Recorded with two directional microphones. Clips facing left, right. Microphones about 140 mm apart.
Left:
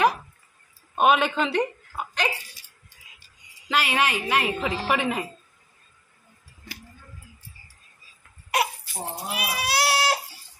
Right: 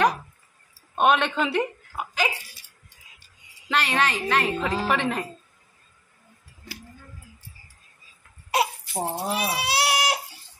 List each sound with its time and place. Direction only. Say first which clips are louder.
0.9 s a woman's voice: left 1 dB; 5° left (ahead or behind)
3.6 s a woman's voice: even; 5° left (ahead or behind)
8.5 s crying: right 1 dB; 25° right (ahead or behind)